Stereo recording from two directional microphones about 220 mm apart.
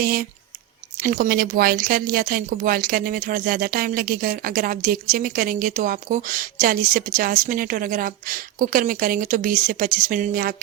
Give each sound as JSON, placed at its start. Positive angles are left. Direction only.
{"t": 0.0, "sound": "speech", "side_deg": -40}